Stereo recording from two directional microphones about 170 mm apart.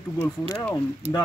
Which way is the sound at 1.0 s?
40° right (ahead or behind).